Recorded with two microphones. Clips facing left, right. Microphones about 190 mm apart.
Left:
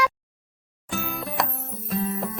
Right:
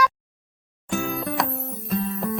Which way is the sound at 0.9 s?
Centre (ahead or behind).